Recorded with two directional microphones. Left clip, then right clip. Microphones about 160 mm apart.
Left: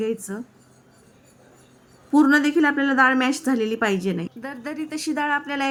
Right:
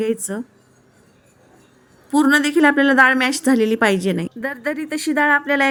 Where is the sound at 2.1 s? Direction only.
25° right (ahead or behind).